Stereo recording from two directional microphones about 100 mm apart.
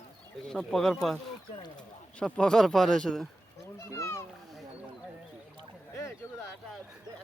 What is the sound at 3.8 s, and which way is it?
Speech, 30° left (ahead or behind).